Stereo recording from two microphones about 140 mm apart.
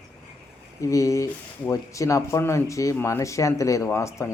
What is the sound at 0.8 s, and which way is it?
Speech, 20° left (ahead or behind).